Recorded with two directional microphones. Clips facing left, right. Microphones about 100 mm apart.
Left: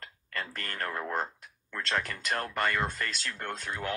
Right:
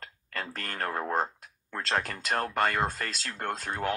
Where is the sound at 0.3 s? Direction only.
40° right (ahead or behind).